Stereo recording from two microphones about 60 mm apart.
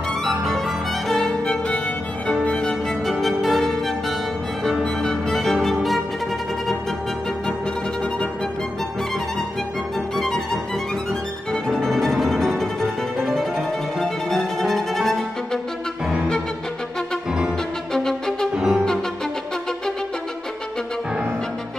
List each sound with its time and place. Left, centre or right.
0.2 s music: centre
1.0 s violin: centre
1.4 s music: centre
3.1 s music: centre
5.0 s music: centre
10.1 s music: centre
17.9 s music: centre
18.5 s music: centre